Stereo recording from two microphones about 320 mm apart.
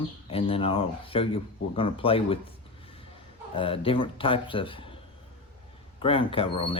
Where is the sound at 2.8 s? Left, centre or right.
Centre.